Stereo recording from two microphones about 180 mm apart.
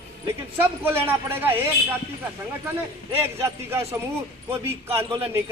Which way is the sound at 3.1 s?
15° right (ahead or behind).